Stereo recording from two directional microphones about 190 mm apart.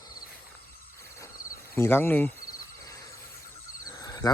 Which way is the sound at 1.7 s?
10° left (ahead or behind).